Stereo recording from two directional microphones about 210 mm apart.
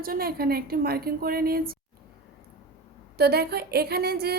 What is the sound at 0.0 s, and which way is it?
A woman's voice, 45° right (ahead or behind).